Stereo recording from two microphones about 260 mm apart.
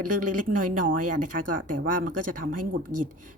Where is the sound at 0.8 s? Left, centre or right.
Right.